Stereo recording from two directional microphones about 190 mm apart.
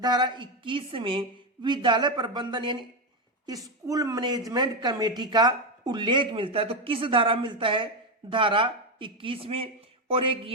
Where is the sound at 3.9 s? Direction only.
20° right (ahead or behind).